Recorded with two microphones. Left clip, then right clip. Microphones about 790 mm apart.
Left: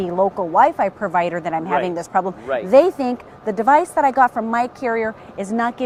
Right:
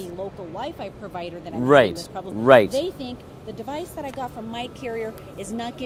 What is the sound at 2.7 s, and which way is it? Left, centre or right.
Speech, left.